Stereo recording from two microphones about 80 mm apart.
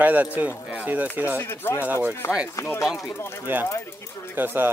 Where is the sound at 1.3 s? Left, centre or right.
Left.